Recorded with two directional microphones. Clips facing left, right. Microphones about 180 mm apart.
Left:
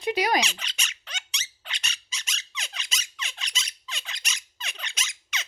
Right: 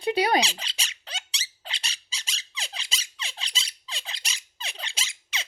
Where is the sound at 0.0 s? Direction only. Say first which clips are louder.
Right 2 dB; 30° right (ahead or behind).